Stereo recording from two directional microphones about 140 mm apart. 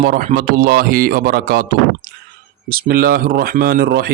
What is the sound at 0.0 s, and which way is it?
Speech, 90° right.